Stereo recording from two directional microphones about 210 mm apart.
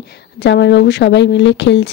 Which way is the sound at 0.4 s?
55° left (ahead or behind).